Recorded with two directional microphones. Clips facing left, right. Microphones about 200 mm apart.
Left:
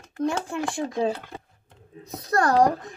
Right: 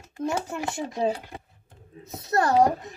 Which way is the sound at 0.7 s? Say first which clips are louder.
Even; 15° right (ahead or behind).